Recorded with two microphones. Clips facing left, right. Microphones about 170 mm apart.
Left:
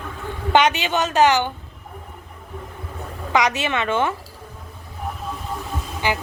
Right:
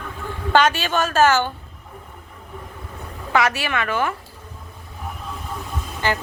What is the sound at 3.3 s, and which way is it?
Speech, 20° left (ahead or behind).